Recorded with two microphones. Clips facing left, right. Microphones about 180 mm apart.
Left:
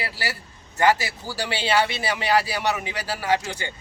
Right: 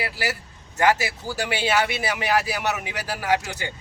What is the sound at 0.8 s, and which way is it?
Speech, 10° right (ahead or behind).